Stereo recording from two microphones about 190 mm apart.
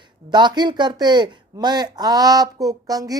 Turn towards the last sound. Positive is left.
turn(degrees=-20)  # may be behind; listen again after turning